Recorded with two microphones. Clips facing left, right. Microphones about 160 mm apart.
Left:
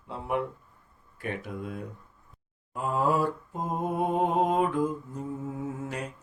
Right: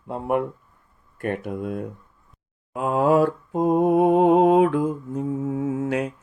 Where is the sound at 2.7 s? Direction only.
75° right (ahead or behind).